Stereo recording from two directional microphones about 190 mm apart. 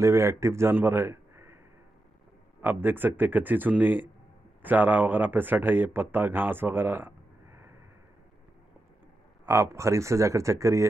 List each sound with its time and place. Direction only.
0.0 s a man's voice: 15° right (ahead or behind)
2.6 s speech: 10° right (ahead or behind)
9.5 s speech: 15° right (ahead or behind)